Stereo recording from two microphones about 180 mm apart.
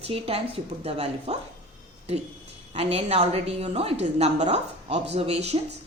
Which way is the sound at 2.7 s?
35° right (ahead or behind).